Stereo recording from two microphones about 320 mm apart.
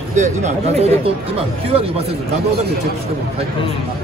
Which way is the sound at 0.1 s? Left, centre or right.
Right.